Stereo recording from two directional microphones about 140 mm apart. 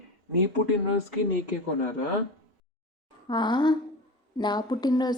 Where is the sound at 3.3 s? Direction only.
35° left (ahead or behind).